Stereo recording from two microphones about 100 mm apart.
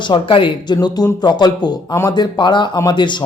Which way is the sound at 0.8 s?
40° left (ahead or behind).